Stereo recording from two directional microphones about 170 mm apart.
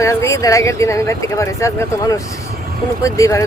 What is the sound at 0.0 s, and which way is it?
Speech, 15° left (ahead or behind).